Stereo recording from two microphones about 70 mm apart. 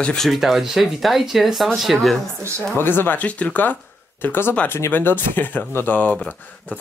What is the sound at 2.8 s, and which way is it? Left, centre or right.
Speech, left.